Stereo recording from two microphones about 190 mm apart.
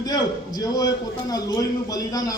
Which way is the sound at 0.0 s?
20° left (ahead or behind).